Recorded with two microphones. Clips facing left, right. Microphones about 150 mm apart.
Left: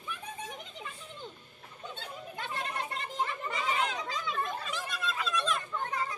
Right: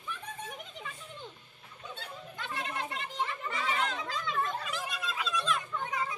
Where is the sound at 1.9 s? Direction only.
35° left (ahead or behind).